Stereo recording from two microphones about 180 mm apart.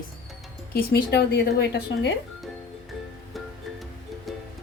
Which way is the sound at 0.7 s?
60° left (ahead or behind).